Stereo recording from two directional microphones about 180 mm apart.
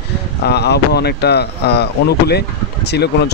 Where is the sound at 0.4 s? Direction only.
65° left (ahead or behind).